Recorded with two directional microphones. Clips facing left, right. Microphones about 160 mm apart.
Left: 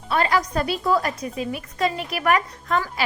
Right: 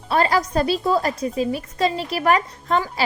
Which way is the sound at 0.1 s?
35° right (ahead or behind).